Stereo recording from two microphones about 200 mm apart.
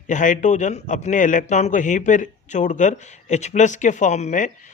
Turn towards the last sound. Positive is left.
turn(degrees=35)  # may be behind; listen again after turning